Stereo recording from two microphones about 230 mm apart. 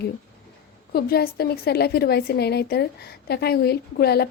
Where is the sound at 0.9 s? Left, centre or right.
Left.